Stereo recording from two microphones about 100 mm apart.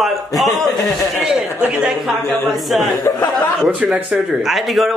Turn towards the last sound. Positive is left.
turn(degrees=0)  # may be behind; listen again after turning